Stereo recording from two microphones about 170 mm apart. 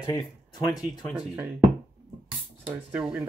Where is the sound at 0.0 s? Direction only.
25° left (ahead or behind).